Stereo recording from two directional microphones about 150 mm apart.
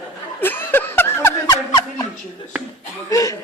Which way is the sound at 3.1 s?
20° left (ahead or behind).